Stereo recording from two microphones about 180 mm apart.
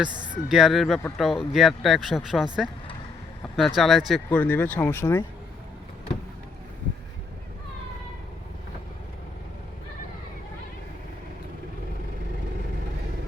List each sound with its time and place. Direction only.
0.1 s speech: 25° right (ahead or behind)
0.4 s speech: centre (ahead or behind); by 5.2 s 15° left (ahead or behind)